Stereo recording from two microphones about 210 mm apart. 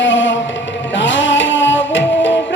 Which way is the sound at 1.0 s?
60° left (ahead or behind).